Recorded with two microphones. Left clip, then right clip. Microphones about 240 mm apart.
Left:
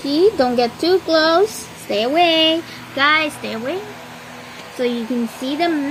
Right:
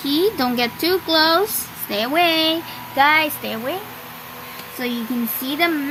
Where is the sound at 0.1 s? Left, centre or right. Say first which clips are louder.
Left 4 dB; right.